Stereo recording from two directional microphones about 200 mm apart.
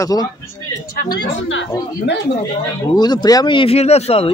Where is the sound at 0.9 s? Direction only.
50° left (ahead or behind).